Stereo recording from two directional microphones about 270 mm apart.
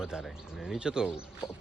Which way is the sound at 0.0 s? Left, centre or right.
Centre.